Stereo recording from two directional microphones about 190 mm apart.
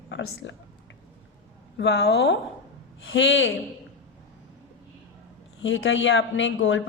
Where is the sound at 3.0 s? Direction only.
75° left (ahead or behind).